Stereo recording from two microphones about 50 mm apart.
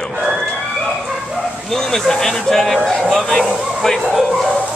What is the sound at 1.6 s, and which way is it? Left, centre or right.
Speech, centre.